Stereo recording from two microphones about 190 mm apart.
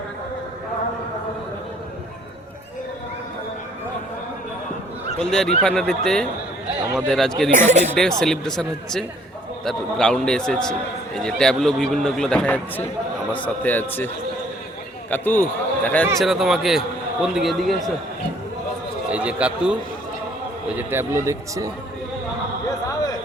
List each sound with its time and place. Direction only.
5.2 s a man's voice: 5° left (ahead or behind)
7.5 s speech: 40° right (ahead or behind)
7.9 s a man's voice: 5° left (ahead or behind)
15.1 s a man's voice: 10° left (ahead or behind)
19.1 s a man's voice: 5° right (ahead or behind)
20.7 s a man's voice: 10° right (ahead or behind)